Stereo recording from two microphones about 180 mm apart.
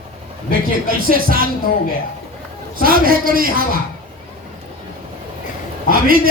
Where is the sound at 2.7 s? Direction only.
55° right (ahead or behind).